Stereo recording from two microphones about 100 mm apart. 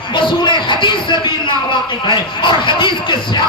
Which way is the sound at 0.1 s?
50° left (ahead or behind).